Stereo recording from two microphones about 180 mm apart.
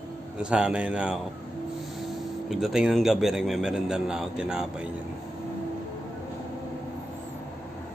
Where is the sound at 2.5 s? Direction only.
Centre (ahead or behind).